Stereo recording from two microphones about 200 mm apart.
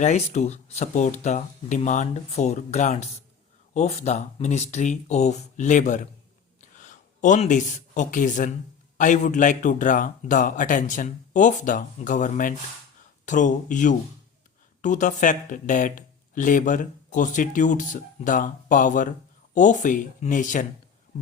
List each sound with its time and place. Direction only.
0.0 s speech: 35° left (ahead or behind)
6.6 s a sound: 40° left (ahead or behind)
9.0 s speech: 40° left (ahead or behind)